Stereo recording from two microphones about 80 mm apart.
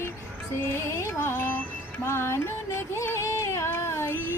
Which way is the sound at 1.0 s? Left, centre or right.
Left.